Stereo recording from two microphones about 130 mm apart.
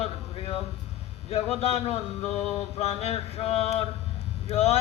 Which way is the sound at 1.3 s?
50° left (ahead or behind).